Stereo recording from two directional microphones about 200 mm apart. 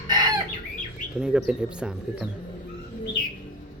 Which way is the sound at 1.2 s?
5° right (ahead or behind).